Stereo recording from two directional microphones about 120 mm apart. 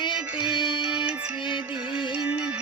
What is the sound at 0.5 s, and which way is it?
Music, 40° left (ahead or behind).